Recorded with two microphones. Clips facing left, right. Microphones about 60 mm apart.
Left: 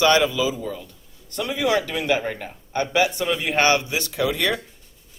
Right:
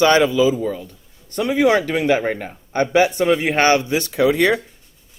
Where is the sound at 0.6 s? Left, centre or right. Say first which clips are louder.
Right 7 dB; right.